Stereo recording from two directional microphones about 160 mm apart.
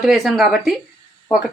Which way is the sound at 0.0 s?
Centre (ahead or behind).